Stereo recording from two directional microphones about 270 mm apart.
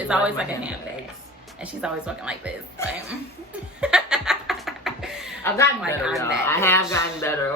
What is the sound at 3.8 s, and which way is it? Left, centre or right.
Laughter, centre.